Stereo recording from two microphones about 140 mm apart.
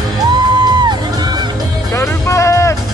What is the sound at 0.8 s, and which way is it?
Music, 30° right (ahead or behind).